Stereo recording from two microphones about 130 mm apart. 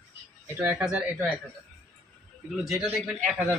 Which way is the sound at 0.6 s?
15° right (ahead or behind).